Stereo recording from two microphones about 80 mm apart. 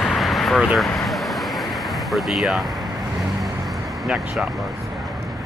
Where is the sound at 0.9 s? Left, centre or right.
Centre.